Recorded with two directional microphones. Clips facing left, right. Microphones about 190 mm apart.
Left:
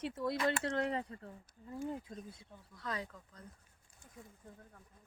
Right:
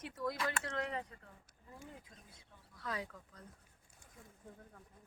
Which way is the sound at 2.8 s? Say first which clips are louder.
Left 1 dB; 5° right (ahead or behind).